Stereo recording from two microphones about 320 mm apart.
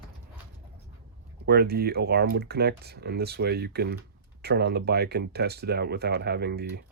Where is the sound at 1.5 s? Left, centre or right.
Right.